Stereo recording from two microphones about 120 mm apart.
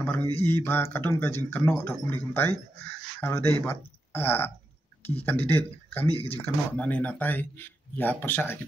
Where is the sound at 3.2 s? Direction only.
20° left (ahead or behind).